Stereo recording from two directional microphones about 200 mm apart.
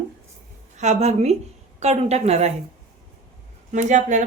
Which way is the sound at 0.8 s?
35° right (ahead or behind).